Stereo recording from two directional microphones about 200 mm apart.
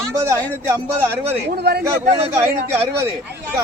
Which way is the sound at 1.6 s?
55° right (ahead or behind).